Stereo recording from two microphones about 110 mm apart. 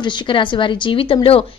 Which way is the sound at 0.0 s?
50° left (ahead or behind).